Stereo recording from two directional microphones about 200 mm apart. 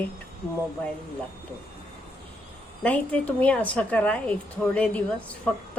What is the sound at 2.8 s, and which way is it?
A woman's voice, 5° left (ahead or behind).